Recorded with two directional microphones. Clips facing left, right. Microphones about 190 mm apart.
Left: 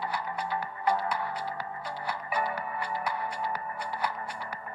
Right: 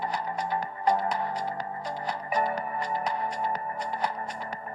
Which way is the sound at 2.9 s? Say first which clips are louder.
Right 3 dB; 20° right (ahead or behind).